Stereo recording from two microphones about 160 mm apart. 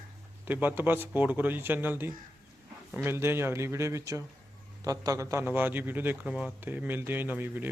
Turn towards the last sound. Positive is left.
turn(degrees=-10)  # may be behind; listen again after turning